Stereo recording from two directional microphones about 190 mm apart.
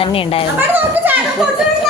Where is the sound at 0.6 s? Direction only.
10° right (ahead or behind).